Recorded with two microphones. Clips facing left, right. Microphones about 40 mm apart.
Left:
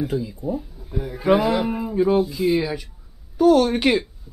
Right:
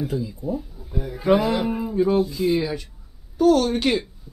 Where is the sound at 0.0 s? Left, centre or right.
Centre.